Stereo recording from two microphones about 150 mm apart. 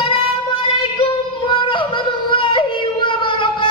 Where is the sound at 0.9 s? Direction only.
35° left (ahead or behind).